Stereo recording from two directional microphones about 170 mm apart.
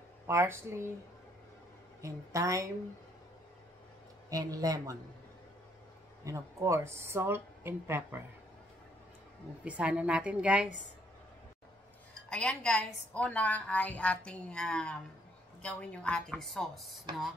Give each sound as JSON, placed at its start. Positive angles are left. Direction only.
{"t": 0.3, "sound": "speech", "side_deg": -15}
{"t": 2.0, "sound": "speech", "side_deg": -20}
{"t": 4.3, "sound": "speech", "side_deg": -20}
{"t": 6.2, "sound": "speech", "side_deg": -15}
{"t": 9.7, "sound": "speech", "side_deg": -5}
{"t": 12.3, "sound": "a woman's voice", "side_deg": 5}